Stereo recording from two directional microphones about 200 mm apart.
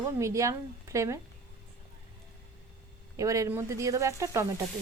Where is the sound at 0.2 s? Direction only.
15° right (ahead or behind).